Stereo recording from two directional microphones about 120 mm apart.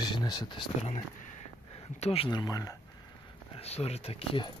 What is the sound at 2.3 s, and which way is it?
Speech, 30° left (ahead or behind).